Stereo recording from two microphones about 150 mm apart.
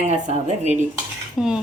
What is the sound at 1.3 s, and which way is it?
Cutlery, 5° right (ahead or behind).